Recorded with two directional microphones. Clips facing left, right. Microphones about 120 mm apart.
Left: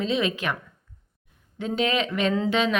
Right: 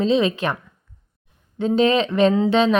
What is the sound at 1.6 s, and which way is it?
Speech, 30° right (ahead or behind).